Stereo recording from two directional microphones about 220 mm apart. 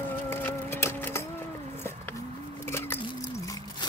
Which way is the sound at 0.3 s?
10° left (ahead or behind).